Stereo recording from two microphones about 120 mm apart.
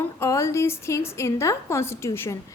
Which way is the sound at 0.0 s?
25° left (ahead or behind).